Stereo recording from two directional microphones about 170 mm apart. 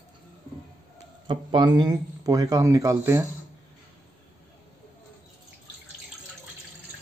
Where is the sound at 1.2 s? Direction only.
30° right (ahead or behind).